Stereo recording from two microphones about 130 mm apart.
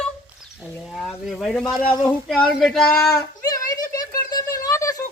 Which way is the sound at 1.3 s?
5° left (ahead or behind).